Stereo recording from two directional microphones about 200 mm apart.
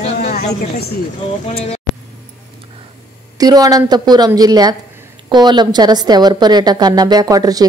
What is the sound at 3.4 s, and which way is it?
A woman's voice, 20° right (ahead or behind).